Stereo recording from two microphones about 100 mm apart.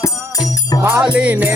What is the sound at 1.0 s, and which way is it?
Music, 15° right (ahead or behind).